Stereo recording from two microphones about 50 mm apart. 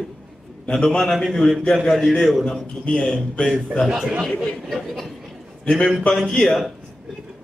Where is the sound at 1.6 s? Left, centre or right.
Centre.